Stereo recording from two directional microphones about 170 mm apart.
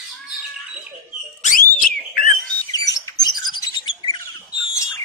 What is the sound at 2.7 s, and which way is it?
Bird, 20° left (ahead or behind).